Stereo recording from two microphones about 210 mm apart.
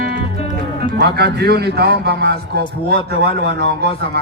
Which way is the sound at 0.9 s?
50° right (ahead or behind).